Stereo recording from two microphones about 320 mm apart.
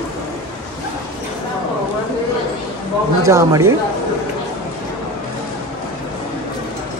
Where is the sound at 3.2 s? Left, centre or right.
Centre.